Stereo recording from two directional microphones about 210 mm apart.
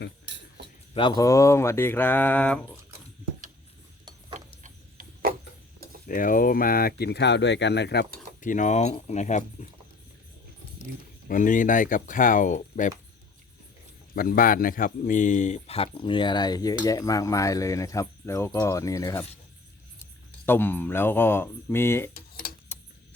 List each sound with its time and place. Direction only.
0.9 s speech: 20° left (ahead or behind)
4.6 s a sound: 40° right (ahead or behind)
6.1 s speech: 40° left (ahead or behind)
8.4 s a man's voice: 40° left (ahead or behind)
11.3 s a man's voice: 40° left (ahead or behind)
14.2 s a man's voice: 45° left (ahead or behind); by 22.1 s 10° left (ahead or behind)
22.1 s tick-tock: 45° left (ahead or behind)